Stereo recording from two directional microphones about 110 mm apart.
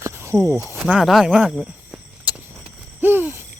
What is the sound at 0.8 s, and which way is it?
Speech, 5° right (ahead or behind).